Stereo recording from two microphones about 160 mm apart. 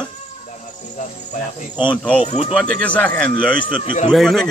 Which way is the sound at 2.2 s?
40° left (ahead or behind).